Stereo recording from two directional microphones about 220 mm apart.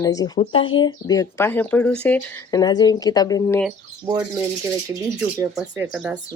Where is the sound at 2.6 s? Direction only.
20° left (ahead or behind).